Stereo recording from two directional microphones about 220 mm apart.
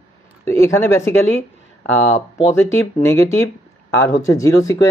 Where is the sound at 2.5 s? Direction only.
10° left (ahead or behind).